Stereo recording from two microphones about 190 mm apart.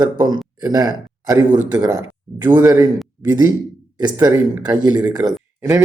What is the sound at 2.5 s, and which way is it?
Speech, 10° right (ahead or behind).